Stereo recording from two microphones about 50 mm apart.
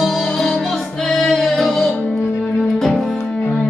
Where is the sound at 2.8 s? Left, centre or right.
Centre.